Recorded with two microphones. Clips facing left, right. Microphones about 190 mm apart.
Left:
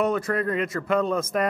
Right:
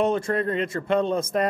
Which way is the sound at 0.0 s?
30° right (ahead or behind).